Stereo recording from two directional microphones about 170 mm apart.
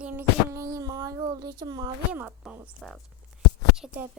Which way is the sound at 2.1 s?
10° right (ahead or behind).